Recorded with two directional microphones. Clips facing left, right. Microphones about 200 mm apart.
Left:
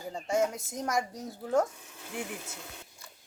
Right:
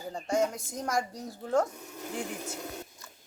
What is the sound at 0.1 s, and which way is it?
Speech, 5° left (ahead or behind).